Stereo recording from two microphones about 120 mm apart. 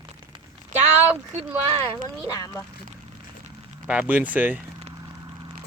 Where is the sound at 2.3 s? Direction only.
30° left (ahead or behind).